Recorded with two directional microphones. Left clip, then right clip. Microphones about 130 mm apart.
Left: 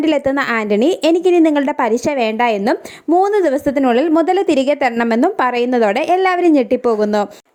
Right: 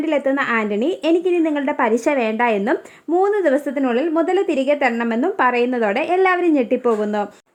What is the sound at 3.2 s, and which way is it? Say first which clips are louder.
A woman's voice: left 2 dB; 40° left (ahead or behind).